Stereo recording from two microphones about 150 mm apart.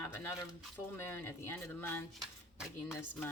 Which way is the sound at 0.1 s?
15° left (ahead or behind).